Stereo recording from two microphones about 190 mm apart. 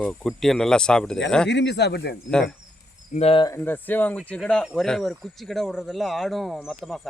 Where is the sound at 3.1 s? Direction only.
30° left (ahead or behind).